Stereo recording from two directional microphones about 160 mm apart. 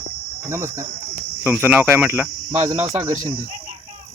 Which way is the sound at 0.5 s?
15° right (ahead or behind).